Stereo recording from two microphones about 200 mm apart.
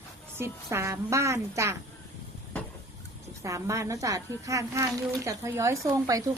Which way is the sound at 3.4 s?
15° right (ahead or behind).